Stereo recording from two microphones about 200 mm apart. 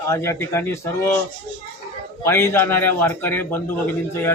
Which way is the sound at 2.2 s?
10° left (ahead or behind).